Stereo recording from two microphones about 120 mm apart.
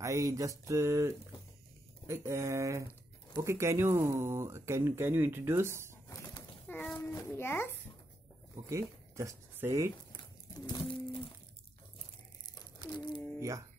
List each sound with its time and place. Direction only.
0.0 s speech: 25° right (ahead or behind)
6.7 s a sound: 10° left (ahead or behind)
7.0 s a child's voice: 20° left (ahead or behind)
8.6 s speech: 25° right (ahead or behind)
10.7 s pigeon: 45° left (ahead or behind)